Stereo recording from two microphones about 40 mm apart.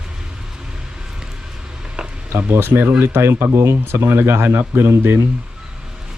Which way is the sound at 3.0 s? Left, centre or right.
Right.